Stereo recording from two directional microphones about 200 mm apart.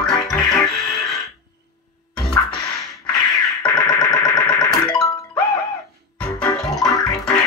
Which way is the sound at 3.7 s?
20° left (ahead or behind).